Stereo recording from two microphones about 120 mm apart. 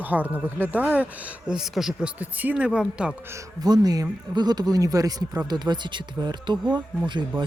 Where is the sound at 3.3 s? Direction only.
30° right (ahead or behind).